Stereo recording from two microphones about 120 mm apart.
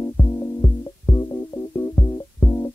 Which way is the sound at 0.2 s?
35° left (ahead or behind).